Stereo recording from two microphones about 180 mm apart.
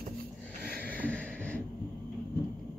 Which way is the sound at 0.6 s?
55° right (ahead or behind).